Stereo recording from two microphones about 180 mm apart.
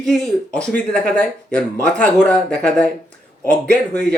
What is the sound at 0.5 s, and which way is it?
Speech, 5° left (ahead or behind).